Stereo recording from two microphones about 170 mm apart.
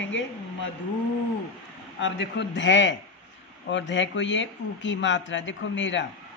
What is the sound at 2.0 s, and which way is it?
A woman's voice, 90° left.